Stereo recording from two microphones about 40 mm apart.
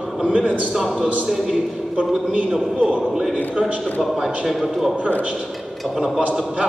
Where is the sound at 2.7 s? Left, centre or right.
Right.